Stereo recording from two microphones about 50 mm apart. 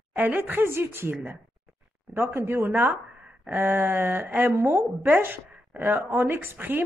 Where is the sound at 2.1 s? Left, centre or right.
Right.